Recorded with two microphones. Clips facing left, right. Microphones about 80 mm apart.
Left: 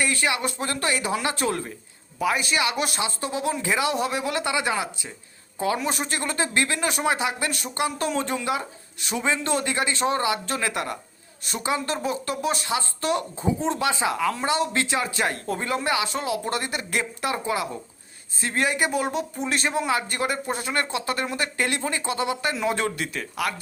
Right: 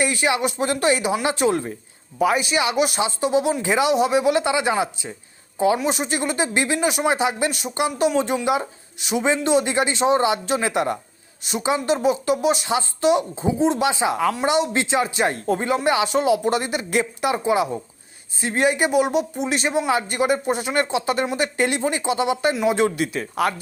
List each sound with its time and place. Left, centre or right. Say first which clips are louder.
0.0 s speech: right 4 dB; centre